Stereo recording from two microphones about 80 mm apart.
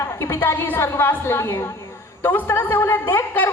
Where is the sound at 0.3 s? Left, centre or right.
Left.